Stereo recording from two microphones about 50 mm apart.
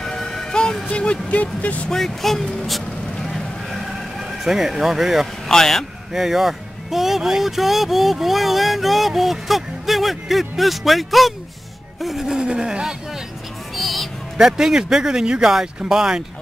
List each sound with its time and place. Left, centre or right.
0.0 s music: centre
0.8 s speech: left
1.9 s speech: centre
4.5 s speech: centre
5.5 s speech: centre
6.1 s speech: centre
12.4 s speech: centre
13.7 s a sound: centre
14.3 s speech: centre